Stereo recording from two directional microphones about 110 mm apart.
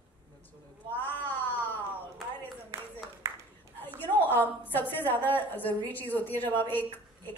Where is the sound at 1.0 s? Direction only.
15° left (ahead or behind).